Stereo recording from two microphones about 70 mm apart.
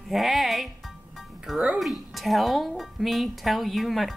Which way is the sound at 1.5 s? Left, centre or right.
Centre.